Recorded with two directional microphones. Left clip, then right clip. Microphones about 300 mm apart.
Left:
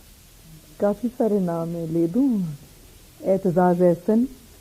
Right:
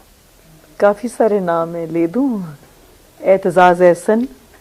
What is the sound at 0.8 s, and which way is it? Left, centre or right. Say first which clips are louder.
A woman's voice: right 9 dB; centre.